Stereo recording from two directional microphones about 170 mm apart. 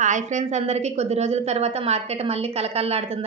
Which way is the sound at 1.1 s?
40° right (ahead or behind).